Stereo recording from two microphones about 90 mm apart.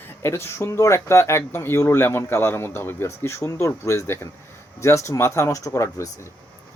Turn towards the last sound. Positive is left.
turn(degrees=35)  # may be behind; listen again after turning